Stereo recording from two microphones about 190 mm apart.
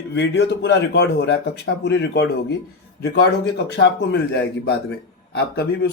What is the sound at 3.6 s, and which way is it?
A man's voice, 60° left (ahead or behind).